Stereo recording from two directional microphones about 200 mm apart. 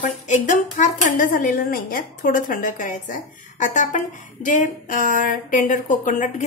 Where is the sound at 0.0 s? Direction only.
40° left (ahead or behind).